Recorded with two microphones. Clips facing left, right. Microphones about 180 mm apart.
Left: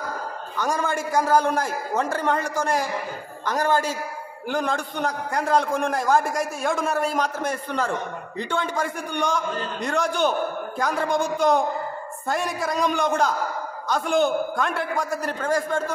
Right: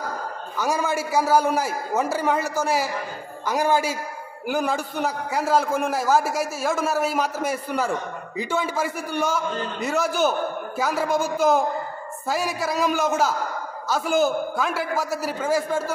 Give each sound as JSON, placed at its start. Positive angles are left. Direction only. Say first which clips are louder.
{"t": 0.6, "sound": "a man's voice", "louder": "right 1 dB", "side_deg": -5}